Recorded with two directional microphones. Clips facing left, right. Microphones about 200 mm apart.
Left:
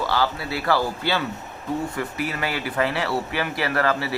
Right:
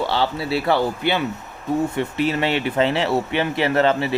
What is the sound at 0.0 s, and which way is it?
Speech, 25° right (ahead or behind).